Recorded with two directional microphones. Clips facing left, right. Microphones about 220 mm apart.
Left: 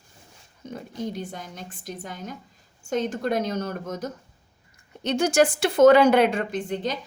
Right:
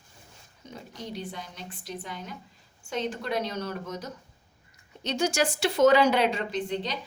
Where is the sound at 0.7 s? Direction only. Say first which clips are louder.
Left 6 dB; 50° left (ahead or behind).